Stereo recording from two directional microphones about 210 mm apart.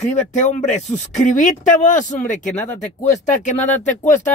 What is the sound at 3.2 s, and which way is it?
Speech, 35° left (ahead or behind).